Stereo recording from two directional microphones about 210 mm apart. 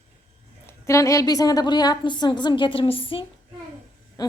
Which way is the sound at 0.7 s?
15° left (ahead or behind).